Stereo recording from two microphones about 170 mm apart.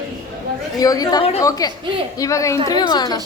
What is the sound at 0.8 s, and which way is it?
A woman's voice, 20° left (ahead or behind).